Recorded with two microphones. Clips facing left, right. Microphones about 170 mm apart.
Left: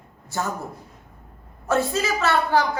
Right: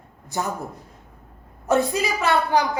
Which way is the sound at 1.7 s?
20° right (ahead or behind).